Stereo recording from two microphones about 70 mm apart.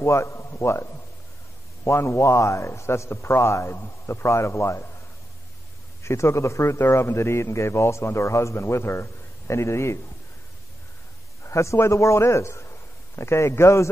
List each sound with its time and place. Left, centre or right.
0.0 s a man's voice: left
6.0 s a man's voice: left
11.4 s a man's voice: left